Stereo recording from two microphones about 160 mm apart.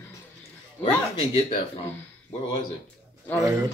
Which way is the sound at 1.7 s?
35° left (ahead or behind).